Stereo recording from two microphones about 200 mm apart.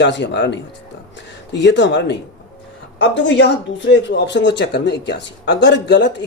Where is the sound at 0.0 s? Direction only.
60° left (ahead or behind).